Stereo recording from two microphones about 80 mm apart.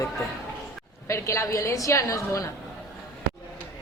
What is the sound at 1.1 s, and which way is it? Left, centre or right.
A woman's voice, left.